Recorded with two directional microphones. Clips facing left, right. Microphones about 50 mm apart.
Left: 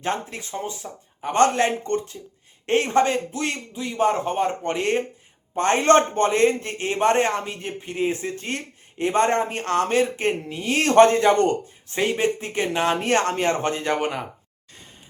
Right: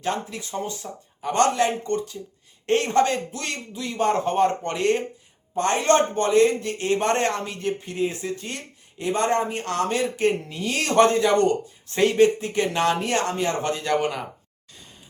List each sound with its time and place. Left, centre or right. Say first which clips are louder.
0.0 s a man's voice: even; left
0.5 s a man's voice: right 1 dB; left
2.6 s speech: left 1 dB; left; by 4.7 s centre
4.7 s speech: even; left
5.5 s a man's voice: left 3 dB; left
10.5 s speech: left 2 dB; left
10.8 s a man's voice: left 3 dB; left
11.9 s speech: right 4 dB; centre
13.0 s a man's voice: left 3 dB; left